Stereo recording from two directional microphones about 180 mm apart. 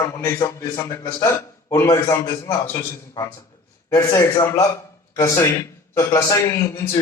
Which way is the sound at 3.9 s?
15° left (ahead or behind).